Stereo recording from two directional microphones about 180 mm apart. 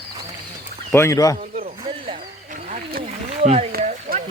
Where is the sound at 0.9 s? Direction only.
15° left (ahead or behind).